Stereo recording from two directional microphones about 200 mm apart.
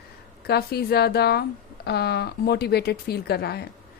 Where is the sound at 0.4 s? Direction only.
55° left (ahead or behind).